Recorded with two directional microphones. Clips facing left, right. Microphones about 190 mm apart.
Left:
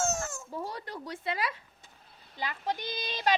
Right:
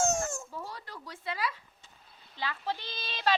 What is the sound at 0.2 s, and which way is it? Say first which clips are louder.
Baby cry: right 3 dB; 25° right (ahead or behind).